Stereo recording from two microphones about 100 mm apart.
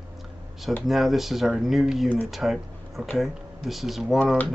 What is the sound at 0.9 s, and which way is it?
Speech, centre (ahead or behind).